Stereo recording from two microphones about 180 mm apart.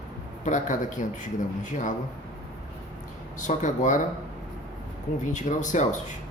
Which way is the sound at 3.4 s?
45° left (ahead or behind).